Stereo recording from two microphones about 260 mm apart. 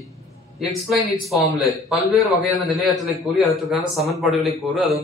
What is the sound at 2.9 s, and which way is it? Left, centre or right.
A man's voice, centre.